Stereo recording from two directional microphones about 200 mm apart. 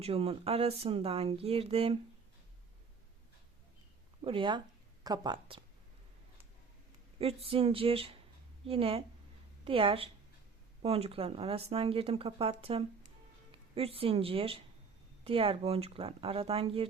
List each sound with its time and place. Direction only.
0.0 s speech: 30° right (ahead or behind)
4.2 s speech: 25° right (ahead or behind)
7.2 s speech: 30° right (ahead or behind)